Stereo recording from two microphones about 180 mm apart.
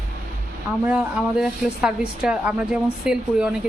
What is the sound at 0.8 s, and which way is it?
A woman's voice, 5° right (ahead or behind).